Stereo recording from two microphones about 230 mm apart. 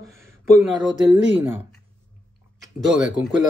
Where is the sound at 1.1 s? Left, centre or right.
Centre.